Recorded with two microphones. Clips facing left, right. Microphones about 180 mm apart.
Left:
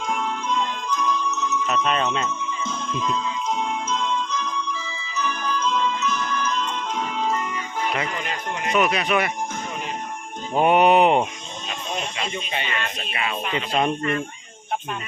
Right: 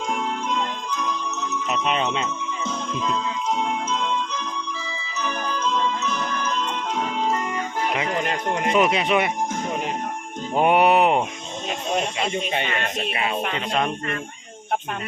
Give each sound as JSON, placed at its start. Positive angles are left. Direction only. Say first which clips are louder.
{"t": 1.6, "sound": "speech", "louder": "even", "side_deg": -15}
{"t": 5.1, "sound": "music", "louder": "left 1 dB", "side_deg": -35}
{"t": 8.2, "sound": "speech", "louder": "right 5 dB", "side_deg": -55}
{"t": 8.7, "sound": "speech", "louder": "right 1 dB", "side_deg": -25}
{"t": 10.6, "sound": "speech", "louder": "left 1 dB", "side_deg": -10}
{"t": 11.9, "sound": "speech", "louder": "right 5 dB", "side_deg": -45}